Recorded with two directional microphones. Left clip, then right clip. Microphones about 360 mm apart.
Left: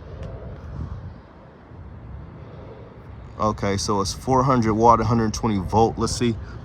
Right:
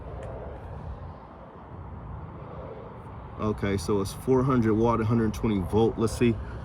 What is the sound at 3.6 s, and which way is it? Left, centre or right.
Speech, centre.